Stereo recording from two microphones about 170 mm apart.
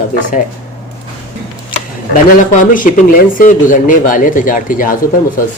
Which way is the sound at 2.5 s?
50° left (ahead or behind).